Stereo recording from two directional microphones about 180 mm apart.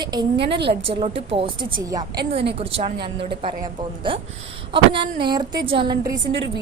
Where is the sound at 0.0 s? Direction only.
20° right (ahead or behind).